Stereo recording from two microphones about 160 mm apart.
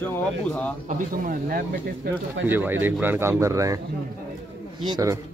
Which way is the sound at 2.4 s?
10° right (ahead or behind).